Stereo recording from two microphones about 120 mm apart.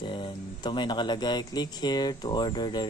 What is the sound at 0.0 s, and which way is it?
Speech, 40° left (ahead or behind).